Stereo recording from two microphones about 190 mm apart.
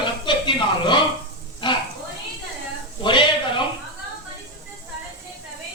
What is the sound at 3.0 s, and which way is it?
Speech, 25° left (ahead or behind).